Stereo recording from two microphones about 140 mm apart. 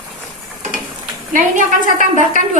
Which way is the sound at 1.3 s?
65° right (ahead or behind).